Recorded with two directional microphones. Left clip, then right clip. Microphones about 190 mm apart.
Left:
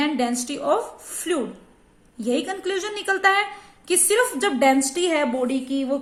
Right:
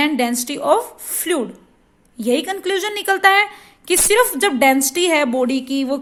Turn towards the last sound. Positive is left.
turn(degrees=-50)  # may be behind; listen again after turning